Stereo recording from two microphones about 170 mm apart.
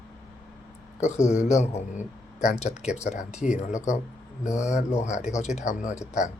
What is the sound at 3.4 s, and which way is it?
Speech, 5° right (ahead or behind).